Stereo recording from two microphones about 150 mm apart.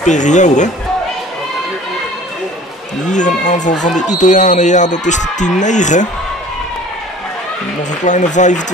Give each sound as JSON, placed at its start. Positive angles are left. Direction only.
{"t": 0.0, "sound": "speech", "side_deg": 55}
{"t": 3.1, "sound": "speech", "side_deg": 55}
{"t": 8.0, "sound": "speech", "side_deg": 55}